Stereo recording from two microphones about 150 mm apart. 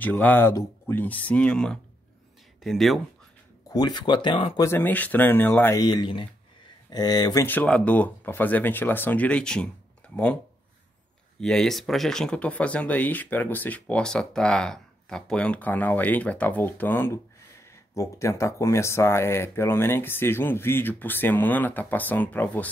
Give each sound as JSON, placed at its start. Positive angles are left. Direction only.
{"t": 0.0, "sound": "speech", "side_deg": 10}
{"t": 3.7, "sound": "speech", "side_deg": 30}
{"t": 4.6, "sound": "speech", "side_deg": 15}
{"t": 7.4, "sound": "speech", "side_deg": 10}
{"t": 11.4, "sound": "speech", "side_deg": 5}